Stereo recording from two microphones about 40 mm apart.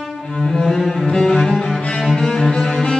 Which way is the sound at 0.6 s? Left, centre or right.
Centre.